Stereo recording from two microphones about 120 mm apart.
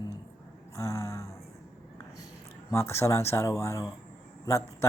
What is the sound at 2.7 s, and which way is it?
Speech, 25° left (ahead or behind).